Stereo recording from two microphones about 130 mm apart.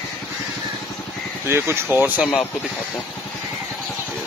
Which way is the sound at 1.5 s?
20° right (ahead or behind).